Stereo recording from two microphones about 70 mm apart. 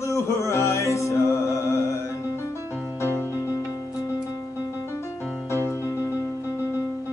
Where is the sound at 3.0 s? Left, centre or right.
Left.